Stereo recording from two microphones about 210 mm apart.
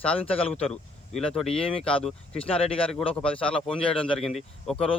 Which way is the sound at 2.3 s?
25° left (ahead or behind).